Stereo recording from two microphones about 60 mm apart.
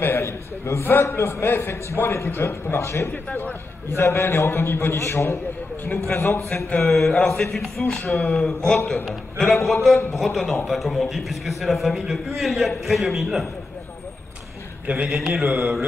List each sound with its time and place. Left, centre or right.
0.0 s a sound: left
1.0 s a man's voice: left
3.1 s a man's voice: left
3.9 s a man's voice: left
6.9 s a man's voice: centre
8.0 s a man's voice: left
8.4 s a man's voice: centre
15.0 s a man's voice: centre